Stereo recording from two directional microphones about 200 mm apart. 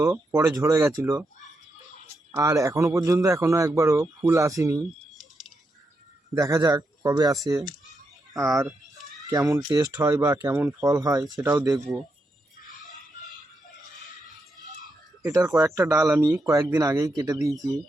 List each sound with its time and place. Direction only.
0.0 s speech: 15° right (ahead or behind)
2.3 s speech: 15° right (ahead or behind)
6.3 s speech: 15° right (ahead or behind)
15.2 s speech: 10° right (ahead or behind)